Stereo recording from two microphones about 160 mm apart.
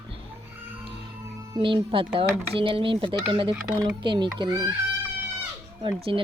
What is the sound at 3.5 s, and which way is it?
Speech, 20° right (ahead or behind).